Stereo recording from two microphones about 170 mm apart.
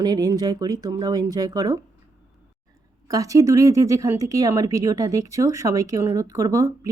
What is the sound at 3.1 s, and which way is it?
A woman's voice, 20° right (ahead or behind).